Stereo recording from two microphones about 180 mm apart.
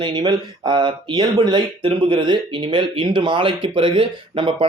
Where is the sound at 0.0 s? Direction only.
25° right (ahead or behind).